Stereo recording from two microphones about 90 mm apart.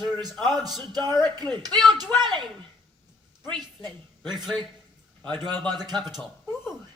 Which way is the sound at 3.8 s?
55° right (ahead or behind).